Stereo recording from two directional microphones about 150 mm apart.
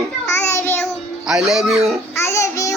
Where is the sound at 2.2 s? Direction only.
20° left (ahead or behind).